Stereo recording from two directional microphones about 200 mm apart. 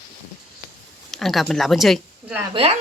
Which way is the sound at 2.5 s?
30° right (ahead or behind).